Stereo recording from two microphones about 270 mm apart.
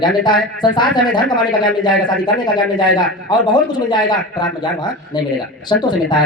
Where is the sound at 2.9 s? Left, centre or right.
Centre.